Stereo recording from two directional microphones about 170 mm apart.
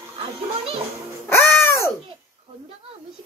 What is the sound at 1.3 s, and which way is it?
Babbling, 15° left (ahead or behind).